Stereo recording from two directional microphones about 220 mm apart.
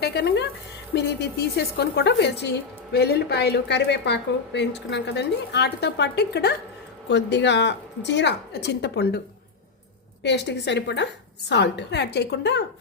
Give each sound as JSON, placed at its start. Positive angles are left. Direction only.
{"t": 0.0, "sound": "a woman's voice", "side_deg": 50}
{"t": 10.2, "sound": "a woman's voice", "side_deg": 50}